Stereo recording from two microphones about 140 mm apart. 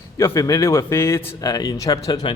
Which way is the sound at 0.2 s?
20° left (ahead or behind).